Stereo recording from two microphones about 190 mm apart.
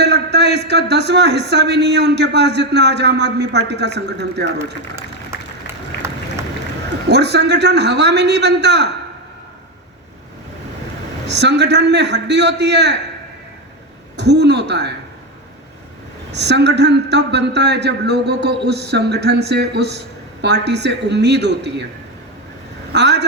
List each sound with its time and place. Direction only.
0.0 s a man's voice: 60° right (ahead or behind)
4.5 s applause: 15° right (ahead or behind)
7.1 s a man's voice: 65° right (ahead or behind)
11.3 s a man's voice: 65° right (ahead or behind)
14.2 s a man's voice: 65° right (ahead or behind)
16.3 s a man's voice: 65° right (ahead or behind)
22.9 s speech: 65° right (ahead or behind)